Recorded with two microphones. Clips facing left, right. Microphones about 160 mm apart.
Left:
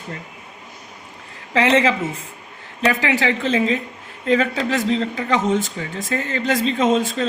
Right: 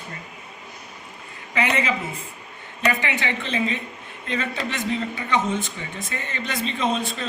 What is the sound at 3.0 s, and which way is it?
A man's voice, 90° left.